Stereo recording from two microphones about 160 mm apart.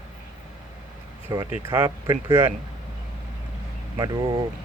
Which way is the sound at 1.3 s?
25° right (ahead or behind).